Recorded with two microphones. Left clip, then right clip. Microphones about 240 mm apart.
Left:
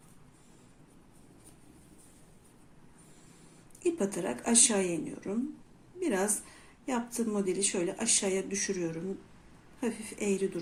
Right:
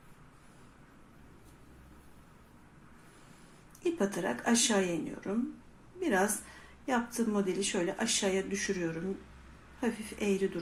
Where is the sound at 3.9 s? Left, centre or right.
Centre.